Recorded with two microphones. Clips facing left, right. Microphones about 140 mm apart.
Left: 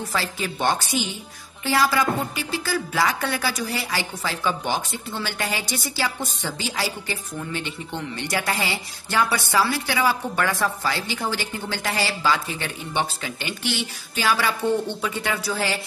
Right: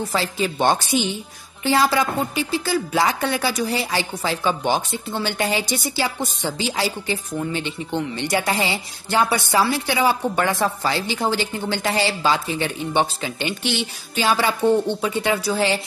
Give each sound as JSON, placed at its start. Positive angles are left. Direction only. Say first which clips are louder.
{"t": 0.1, "sound": "a woman's voice", "louder": "right 4 dB", "side_deg": -25}